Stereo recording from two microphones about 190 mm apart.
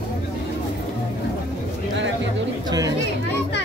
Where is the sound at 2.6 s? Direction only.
20° right (ahead or behind).